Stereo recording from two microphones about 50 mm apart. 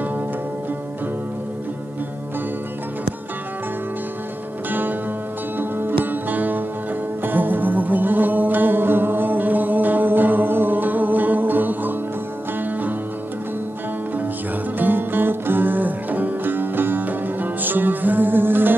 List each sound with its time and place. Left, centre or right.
4.6 s music: right
14.8 s music: right